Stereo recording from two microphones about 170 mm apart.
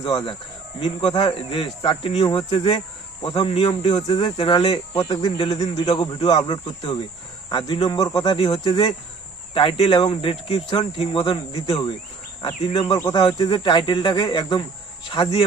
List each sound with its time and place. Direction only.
0.0 s speech: 25° left (ahead or behind)